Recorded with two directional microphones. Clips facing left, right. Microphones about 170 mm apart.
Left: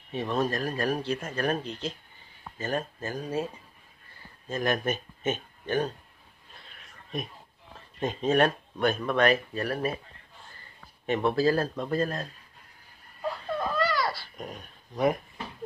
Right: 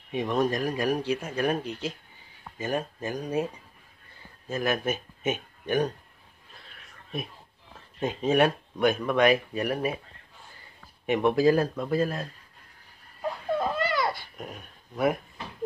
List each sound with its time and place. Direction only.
0.1 s speech: 15° right (ahead or behind)
4.5 s speech: 5° right (ahead or behind)
8.0 s speech: 10° right (ahead or behind)
11.1 s speech: 15° right (ahead or behind)
13.9 s dog: 20° right (ahead or behind)
14.3 s speech: 5° right (ahead or behind)